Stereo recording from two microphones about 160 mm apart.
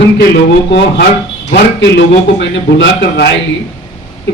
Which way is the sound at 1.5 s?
90° left.